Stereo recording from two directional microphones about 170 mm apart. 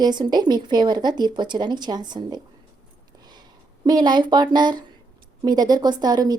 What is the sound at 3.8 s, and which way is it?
Speech, 25° right (ahead or behind).